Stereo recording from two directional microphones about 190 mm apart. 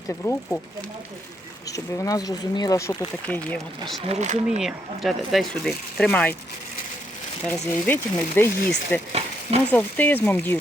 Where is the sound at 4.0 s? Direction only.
35° right (ahead or behind).